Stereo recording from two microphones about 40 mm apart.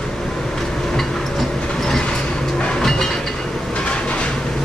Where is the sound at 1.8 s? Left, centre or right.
Centre.